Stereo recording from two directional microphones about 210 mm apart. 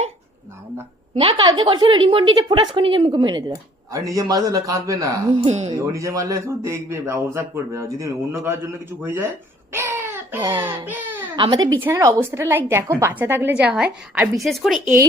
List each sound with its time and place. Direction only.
1.1 s a woman's voice: 20° right (ahead or behind)
5.5 s speech: 30° right (ahead or behind)
5.9 s a man's voice: 15° right (ahead or behind)
9.7 s a sound: 10° right (ahead or behind)
10.7 s speech: 10° right (ahead or behind)
11.3 s a man's voice: 20° right (ahead or behind); by 14.8 s centre (ahead or behind)